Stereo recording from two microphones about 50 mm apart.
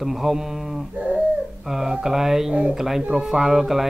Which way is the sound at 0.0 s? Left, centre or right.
Centre.